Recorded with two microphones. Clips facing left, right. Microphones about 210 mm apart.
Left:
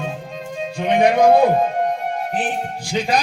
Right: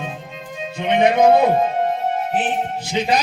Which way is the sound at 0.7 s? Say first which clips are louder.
Even; 20° right (ahead or behind).